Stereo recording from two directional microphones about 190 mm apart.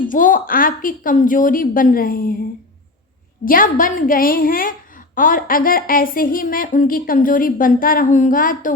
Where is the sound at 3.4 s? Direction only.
45° left (ahead or behind).